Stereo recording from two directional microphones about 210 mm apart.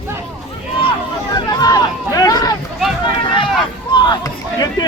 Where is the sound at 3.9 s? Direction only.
20° left (ahead or behind).